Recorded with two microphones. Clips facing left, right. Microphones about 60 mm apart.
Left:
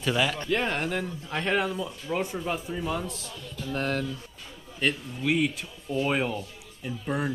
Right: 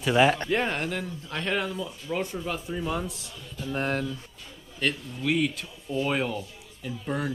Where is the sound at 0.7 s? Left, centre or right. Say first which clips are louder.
Left 1 dB; centre.